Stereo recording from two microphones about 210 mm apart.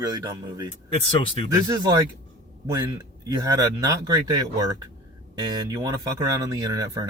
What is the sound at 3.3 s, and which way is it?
Speech, 20° right (ahead or behind).